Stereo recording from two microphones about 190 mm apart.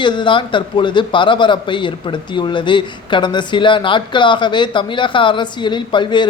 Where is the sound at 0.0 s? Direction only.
25° left (ahead or behind).